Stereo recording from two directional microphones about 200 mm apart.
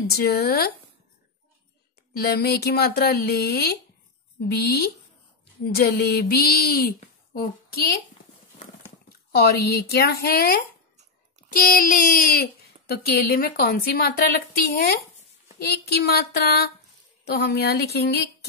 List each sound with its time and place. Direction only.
0.1 s speech: 50° left (ahead or behind)
2.1 s speech: 50° left (ahead or behind)
9.3 s speech: 50° left (ahead or behind)